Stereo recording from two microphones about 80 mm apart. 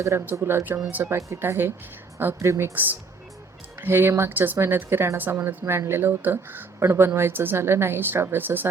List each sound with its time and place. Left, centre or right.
0.3 s speech: right
1.1 s speech: right
3.8 s speech: right